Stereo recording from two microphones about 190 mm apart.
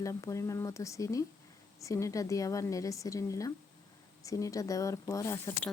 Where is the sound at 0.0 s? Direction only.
15° left (ahead or behind).